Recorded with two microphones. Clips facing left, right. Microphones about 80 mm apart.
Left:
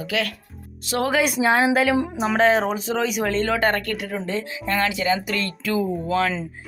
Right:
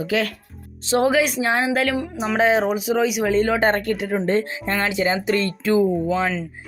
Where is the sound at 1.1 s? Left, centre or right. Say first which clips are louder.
Even; centre; by 4.2 s right.